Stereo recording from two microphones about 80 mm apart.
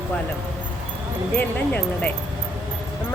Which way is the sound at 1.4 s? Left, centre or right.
Left.